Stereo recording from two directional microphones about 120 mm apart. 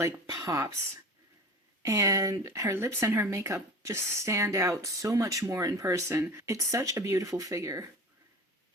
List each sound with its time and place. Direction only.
0.0 s speech: 30° right (ahead or behind)
1.8 s speech: 25° right (ahead or behind)